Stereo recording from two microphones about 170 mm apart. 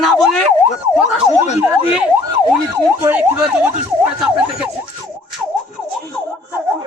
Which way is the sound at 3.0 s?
10° right (ahead or behind).